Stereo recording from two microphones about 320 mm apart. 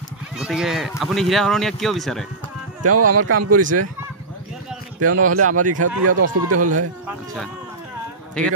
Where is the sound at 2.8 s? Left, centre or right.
Right.